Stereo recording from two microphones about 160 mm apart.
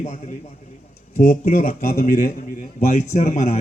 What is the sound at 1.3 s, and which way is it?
A man's voice, 60° left (ahead or behind).